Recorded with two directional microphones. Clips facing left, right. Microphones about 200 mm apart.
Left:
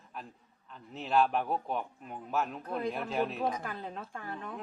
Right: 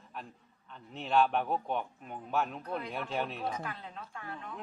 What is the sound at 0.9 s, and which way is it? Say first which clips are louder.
Speech: even; centre (ahead or behind).